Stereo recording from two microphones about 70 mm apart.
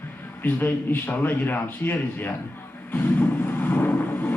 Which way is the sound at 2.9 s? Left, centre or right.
Left.